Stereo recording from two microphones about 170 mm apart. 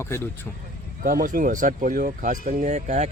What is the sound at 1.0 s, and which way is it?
Speech, 55° right (ahead or behind).